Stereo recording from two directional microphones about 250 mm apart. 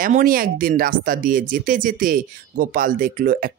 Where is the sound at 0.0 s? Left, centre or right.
Right.